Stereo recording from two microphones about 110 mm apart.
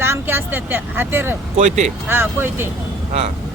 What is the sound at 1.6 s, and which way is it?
Speech, 90° right.